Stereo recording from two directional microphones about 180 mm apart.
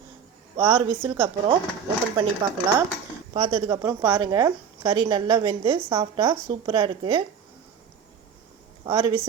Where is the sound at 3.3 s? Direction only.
25° right (ahead or behind).